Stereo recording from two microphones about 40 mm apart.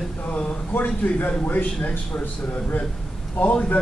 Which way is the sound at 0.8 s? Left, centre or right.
Left.